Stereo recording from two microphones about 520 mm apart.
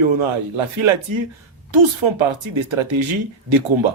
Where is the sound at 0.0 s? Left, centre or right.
Right.